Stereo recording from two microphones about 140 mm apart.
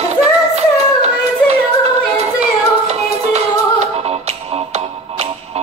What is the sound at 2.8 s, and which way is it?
Music, 50° right (ahead or behind).